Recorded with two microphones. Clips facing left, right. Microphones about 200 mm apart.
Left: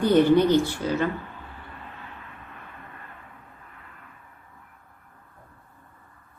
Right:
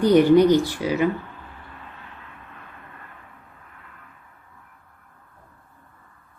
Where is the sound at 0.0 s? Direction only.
15° right (ahead or behind).